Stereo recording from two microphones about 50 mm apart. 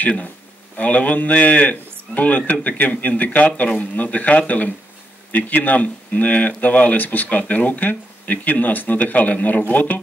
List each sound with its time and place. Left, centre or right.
0.0 s speech: left